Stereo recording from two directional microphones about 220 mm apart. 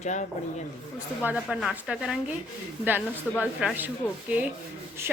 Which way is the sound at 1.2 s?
5° right (ahead or behind).